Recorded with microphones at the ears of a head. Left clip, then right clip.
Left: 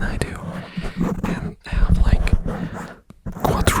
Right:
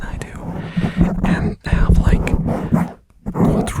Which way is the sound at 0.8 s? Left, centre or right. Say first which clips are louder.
Right 5 dB; right.